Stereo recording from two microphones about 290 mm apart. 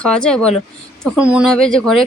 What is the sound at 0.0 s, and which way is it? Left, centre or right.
Speech, centre.